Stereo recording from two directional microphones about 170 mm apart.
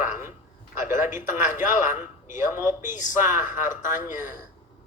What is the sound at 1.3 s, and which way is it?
A man's voice, 15° right (ahead or behind).